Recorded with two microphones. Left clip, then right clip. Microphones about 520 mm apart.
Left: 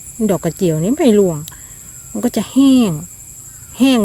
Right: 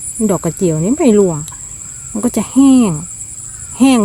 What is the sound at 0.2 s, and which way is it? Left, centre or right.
Speech, left.